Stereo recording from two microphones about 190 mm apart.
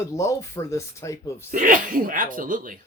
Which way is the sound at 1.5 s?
45° right (ahead or behind).